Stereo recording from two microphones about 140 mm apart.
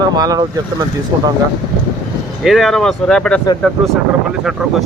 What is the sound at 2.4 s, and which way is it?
Speech, centre (ahead or behind).